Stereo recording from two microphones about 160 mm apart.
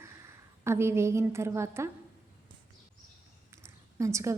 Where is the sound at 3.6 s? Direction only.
20° right (ahead or behind).